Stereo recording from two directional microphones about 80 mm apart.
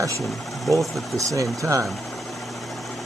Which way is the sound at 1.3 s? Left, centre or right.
Right.